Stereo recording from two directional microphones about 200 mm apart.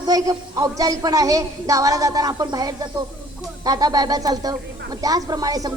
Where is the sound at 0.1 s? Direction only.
15° right (ahead or behind).